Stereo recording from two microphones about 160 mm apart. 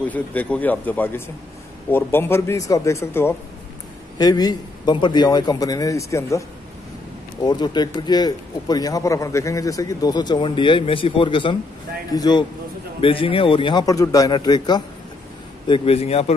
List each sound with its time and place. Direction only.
0.1 s a man's voice: 10° left (ahead or behind)
7.4 s a man's voice: 25° left (ahead or behind)
15.7 s a man's voice: 35° left (ahead or behind)